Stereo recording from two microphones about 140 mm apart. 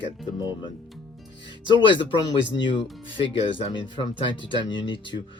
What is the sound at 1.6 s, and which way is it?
Speech, 35° left (ahead or behind).